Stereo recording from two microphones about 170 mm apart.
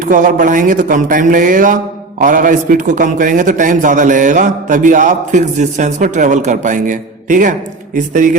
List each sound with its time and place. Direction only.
0.0 s a man's voice: 50° right (ahead or behind)